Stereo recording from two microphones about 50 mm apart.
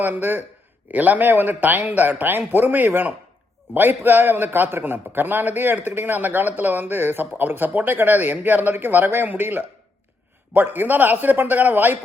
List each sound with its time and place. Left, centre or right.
0.0 s a man's voice: right